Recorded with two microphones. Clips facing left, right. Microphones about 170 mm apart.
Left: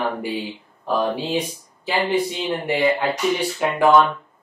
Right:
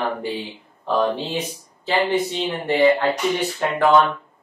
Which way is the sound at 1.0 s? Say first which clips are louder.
Even; 10° left (ahead or behind).